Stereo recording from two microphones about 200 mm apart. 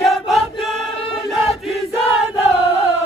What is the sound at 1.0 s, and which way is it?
Crowd, 30° left (ahead or behind).